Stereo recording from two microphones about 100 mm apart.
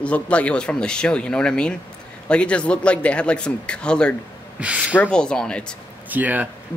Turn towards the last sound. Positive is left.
turn(degrees=-15)  # may be behind; listen again after turning